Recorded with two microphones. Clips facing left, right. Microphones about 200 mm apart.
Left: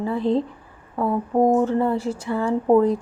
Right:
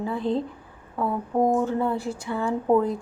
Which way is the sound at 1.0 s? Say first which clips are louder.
Left 4 dB; 25° left (ahead or behind).